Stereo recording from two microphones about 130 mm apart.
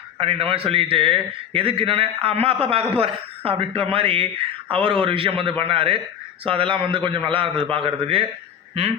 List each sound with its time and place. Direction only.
0.2 s a man's voice: 45° right (ahead or behind)